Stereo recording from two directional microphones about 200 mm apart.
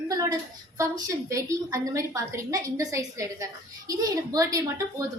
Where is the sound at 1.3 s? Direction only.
15° right (ahead or behind).